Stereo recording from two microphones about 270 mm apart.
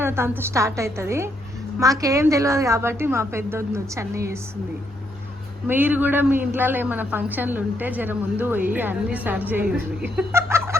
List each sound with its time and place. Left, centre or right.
0.0 s a man's voice: centre
5.6 s a man's voice: centre